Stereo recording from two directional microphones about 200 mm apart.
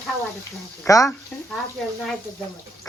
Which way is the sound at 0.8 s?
15° left (ahead or behind).